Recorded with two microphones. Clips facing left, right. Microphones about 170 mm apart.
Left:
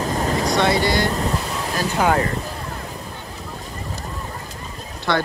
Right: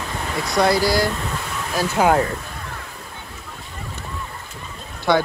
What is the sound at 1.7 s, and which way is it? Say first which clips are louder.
Speech: right 2 dB; centre (ahead or behind).